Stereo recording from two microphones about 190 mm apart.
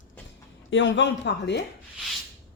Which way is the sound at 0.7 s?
70° left (ahead or behind).